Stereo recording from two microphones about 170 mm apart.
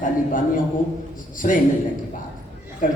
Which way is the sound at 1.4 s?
50° left (ahead or behind).